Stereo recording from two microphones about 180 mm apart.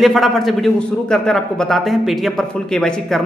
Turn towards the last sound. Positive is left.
turn(degrees=5)  # may be behind; listen again after turning